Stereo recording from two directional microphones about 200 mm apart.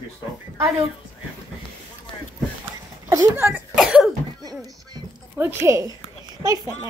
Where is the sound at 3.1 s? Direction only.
15° right (ahead or behind).